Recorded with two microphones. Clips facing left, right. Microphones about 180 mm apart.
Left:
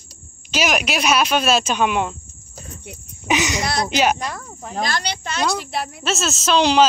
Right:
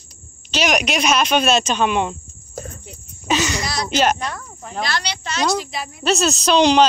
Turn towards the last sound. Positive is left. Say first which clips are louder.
# right 2 dB
turn(degrees=5)  # may be behind; listen again after turning